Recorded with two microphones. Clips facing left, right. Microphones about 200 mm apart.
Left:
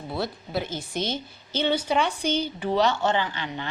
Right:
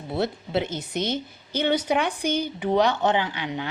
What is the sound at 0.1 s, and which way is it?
A woman's voice, 25° right (ahead or behind).